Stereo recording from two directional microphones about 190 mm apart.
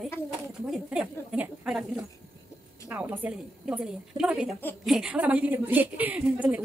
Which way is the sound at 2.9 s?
10° right (ahead or behind).